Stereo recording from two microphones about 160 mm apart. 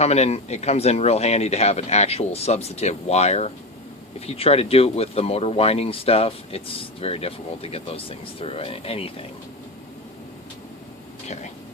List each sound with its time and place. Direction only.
0.0 s speech: 40° left (ahead or behind)